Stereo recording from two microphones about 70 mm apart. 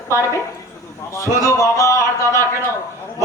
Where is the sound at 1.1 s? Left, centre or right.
Left.